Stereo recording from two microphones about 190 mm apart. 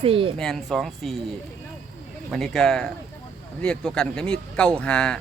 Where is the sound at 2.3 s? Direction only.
Centre (ahead or behind).